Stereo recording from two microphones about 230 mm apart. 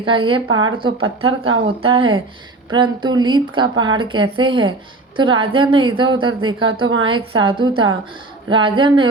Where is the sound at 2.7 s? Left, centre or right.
Centre.